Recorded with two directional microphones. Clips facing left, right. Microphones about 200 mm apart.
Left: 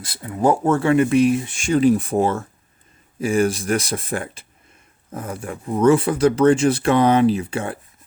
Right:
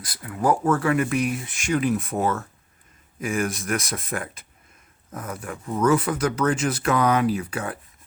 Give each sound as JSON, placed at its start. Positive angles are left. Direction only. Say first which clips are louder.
{"t": 0.0, "sound": "speech", "louder": "left 5 dB", "side_deg": 25}